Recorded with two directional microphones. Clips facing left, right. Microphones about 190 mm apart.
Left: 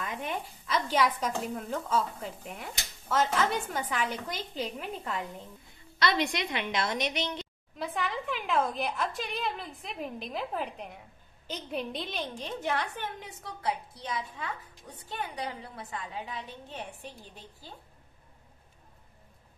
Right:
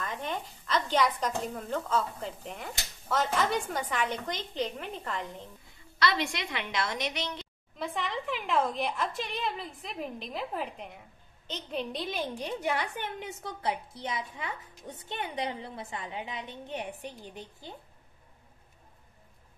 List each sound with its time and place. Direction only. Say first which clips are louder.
0.0 s a woman's voice: even; 10° left (ahead or behind)
5.9 s a woman's voice: left 1 dB; 20° left (ahead or behind)
7.8 s a woman's voice: even; centre (ahead or behind); by 17.7 s 20° right (ahead or behind)